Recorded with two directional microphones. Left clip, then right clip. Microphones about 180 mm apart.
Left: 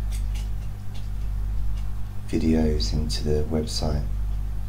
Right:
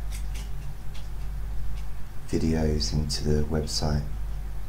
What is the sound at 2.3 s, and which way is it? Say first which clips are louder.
Speech: left 3 dB; 25° left (ahead or behind).